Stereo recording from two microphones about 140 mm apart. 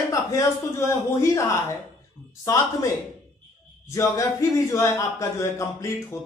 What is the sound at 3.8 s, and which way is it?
A man's voice, 20° left (ahead or behind).